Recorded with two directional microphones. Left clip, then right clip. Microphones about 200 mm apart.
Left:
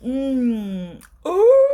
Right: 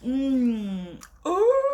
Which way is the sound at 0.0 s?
35° left (ahead or behind).